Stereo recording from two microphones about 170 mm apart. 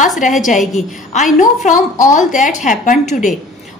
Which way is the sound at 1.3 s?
45° left (ahead or behind).